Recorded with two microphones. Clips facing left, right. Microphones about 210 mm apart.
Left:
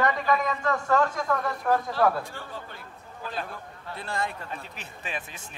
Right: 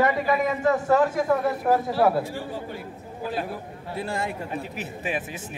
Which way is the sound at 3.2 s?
10° right (ahead or behind).